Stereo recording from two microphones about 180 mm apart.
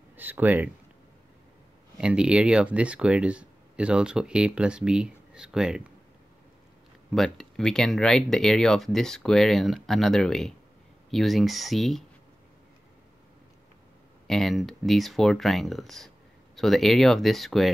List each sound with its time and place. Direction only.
0.1 s speech: 10° right (ahead or behind)
2.0 s speech: 5° right (ahead or behind)
7.1 s speech: centre (ahead or behind)
14.2 s speech: centre (ahead or behind)